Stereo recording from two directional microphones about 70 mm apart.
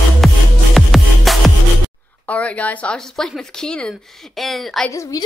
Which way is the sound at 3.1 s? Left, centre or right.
Centre.